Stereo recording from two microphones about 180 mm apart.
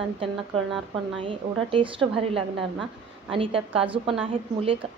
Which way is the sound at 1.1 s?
30° right (ahead or behind).